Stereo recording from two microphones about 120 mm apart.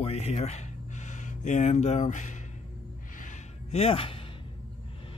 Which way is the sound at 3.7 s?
55° left (ahead or behind).